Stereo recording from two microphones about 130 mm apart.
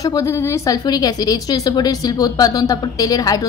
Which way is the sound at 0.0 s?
25° left (ahead or behind).